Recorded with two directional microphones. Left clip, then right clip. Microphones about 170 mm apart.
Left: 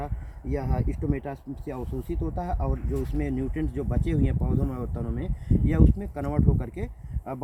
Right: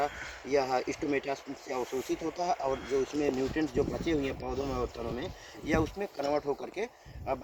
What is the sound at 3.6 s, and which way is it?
Speech, 10° right (ahead or behind).